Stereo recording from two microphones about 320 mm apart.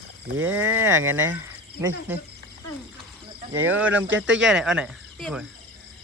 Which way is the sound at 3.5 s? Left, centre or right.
Centre.